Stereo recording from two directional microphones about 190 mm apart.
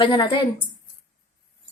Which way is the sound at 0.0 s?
25° left (ahead or behind).